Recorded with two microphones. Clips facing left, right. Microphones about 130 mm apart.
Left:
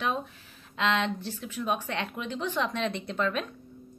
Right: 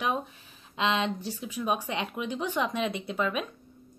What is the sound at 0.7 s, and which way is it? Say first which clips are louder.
Speech: even; 15° right (ahead or behind).